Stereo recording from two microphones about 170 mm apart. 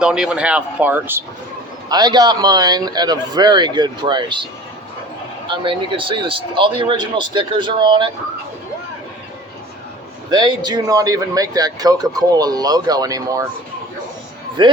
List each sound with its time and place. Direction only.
0.0 s speech: 5° right (ahead or behind)
1.9 s speech: 25° right (ahead or behind)
5.5 s speech: 30° right (ahead or behind)
10.2 s speech: 25° right (ahead or behind)
14.6 s speech: 30° right (ahead or behind)